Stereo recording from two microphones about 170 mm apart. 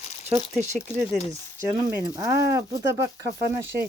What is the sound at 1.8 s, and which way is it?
Speech, 20° right (ahead or behind).